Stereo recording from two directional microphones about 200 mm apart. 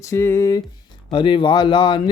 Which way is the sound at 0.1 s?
15° left (ahead or behind).